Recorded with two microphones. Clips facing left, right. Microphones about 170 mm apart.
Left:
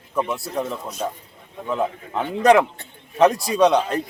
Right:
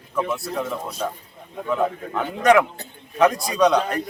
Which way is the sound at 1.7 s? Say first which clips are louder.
Right 1 dB; 30° left (ahead or behind).